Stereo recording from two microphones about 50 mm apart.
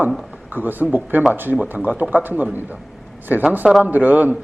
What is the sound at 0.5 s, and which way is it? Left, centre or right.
A man's voice, right.